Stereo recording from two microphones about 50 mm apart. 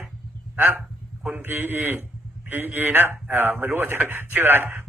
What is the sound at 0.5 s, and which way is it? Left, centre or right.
A man's voice, right.